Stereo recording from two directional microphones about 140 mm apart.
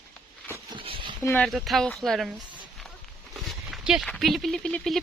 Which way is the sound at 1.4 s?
Centre (ahead or behind).